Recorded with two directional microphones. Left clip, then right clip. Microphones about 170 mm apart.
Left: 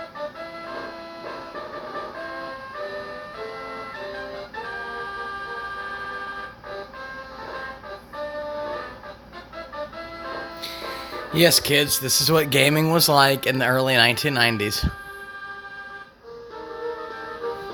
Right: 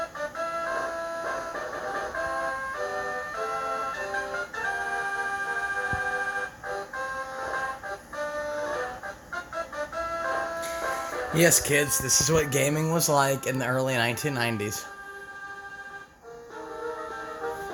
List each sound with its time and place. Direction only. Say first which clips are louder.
11.3 s speech: left 5 dB; 15° left (ahead or behind)